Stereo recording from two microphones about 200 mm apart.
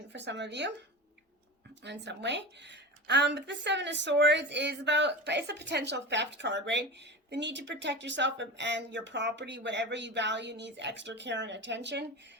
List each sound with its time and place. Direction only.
0.1 s a woman's voice: 60° right (ahead or behind)
1.8 s a woman's voice: 60° right (ahead or behind)